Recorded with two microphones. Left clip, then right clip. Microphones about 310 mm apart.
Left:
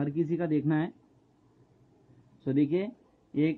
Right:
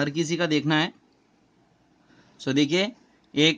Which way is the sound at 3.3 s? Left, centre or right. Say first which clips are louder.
Right 8 dB; right.